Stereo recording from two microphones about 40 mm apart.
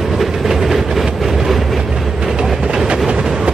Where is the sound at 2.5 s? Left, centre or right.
Right.